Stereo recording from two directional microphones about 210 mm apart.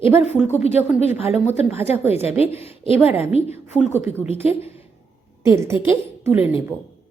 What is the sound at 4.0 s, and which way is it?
Speech, 10° right (ahead or behind).